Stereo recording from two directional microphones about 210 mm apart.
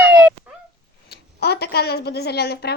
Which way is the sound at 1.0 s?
50° left (ahead or behind).